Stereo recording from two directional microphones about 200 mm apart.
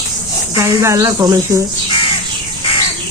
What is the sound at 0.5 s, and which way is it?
Speech, 15° right (ahead or behind).